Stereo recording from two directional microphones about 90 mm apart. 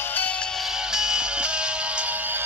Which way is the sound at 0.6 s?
5° right (ahead or behind).